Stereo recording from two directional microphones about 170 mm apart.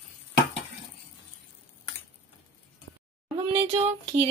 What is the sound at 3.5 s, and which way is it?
Speech, 35° right (ahead or behind).